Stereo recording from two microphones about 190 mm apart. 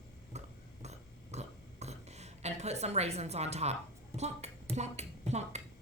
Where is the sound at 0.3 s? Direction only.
35° right (ahead or behind).